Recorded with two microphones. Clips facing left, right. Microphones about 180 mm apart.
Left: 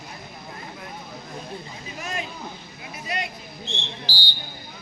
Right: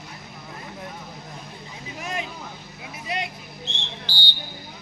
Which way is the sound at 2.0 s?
20° right (ahead or behind).